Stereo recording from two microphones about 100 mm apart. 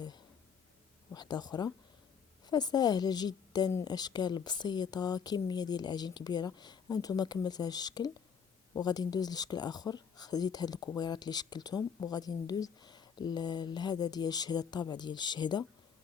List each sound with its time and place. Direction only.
1.1 s speech: 45° left (ahead or behind)